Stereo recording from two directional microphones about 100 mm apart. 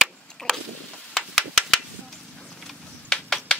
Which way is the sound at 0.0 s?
5° left (ahead or behind).